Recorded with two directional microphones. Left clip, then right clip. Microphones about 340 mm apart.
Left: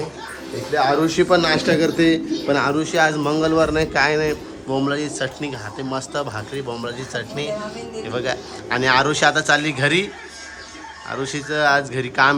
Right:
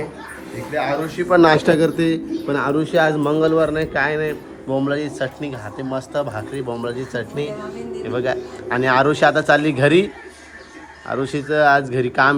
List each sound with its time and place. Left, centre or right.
0.8 s a man's voice: centre
1.3 s a man's voice: centre
11.1 s a man's voice: centre